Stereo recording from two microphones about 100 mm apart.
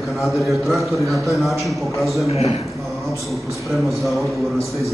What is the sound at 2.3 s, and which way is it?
Speech, 90° left.